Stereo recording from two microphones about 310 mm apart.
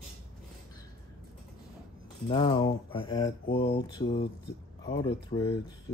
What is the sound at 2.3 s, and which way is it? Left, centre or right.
Speech, centre.